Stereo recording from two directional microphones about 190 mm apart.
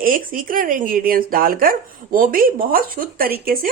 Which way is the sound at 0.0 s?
45° right (ahead or behind).